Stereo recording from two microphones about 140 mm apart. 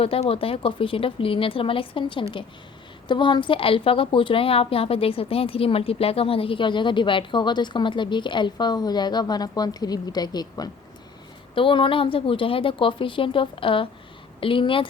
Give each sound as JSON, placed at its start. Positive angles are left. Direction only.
{"t": 0.0, "sound": "a woman's voice", "side_deg": 45}